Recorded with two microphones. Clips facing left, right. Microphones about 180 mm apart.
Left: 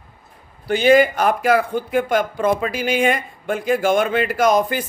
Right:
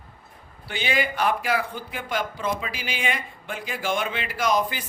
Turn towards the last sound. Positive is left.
turn(degrees=50)  # may be behind; listen again after turning